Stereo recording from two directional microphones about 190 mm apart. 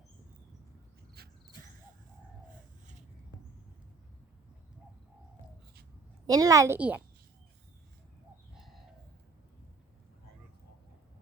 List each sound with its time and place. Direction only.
6.2 s a woman's voice: 20° right (ahead or behind)
8.5 s bird: centre (ahead or behind)